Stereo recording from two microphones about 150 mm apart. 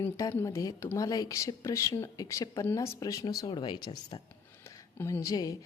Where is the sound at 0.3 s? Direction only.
20° left (ahead or behind).